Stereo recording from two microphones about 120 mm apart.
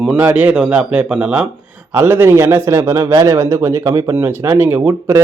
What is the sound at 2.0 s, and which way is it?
A man's voice, 20° right (ahead or behind).